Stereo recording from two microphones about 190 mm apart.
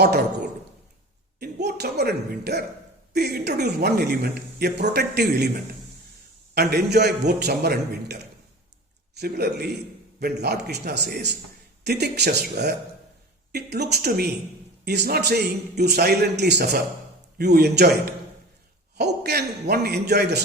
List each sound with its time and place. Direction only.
0.0 s speech: 60° right (ahead or behind)
1.4 s a woman's voice: 60° right (ahead or behind)
6.5 s a man's voice: 55° right (ahead or behind)